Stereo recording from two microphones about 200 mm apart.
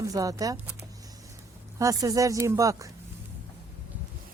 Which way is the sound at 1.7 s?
15° right (ahead or behind).